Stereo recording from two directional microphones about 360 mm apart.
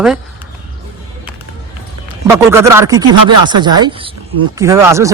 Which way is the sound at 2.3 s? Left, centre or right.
Centre.